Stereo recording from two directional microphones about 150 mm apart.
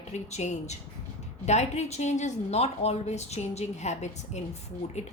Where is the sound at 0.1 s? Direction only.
50° left (ahead or behind).